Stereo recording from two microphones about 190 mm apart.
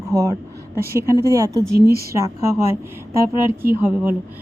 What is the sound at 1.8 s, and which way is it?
Speech, 55° right (ahead or behind).